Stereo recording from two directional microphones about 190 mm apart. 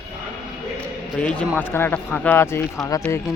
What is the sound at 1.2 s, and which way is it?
Speech, 5° left (ahead or behind).